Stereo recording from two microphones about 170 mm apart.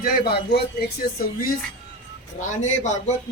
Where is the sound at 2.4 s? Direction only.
45° left (ahead or behind).